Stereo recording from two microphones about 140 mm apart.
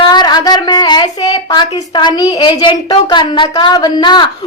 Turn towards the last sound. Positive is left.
turn(degrees=35)  # may be behind; listen again after turning